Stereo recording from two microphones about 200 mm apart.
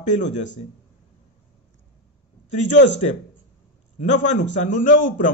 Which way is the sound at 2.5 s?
35° left (ahead or behind).